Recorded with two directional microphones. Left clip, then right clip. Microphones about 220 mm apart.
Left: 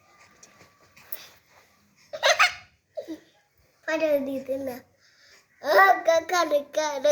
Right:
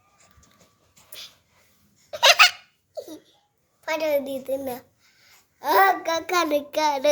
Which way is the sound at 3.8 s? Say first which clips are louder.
Even; 50° right (ahead or behind).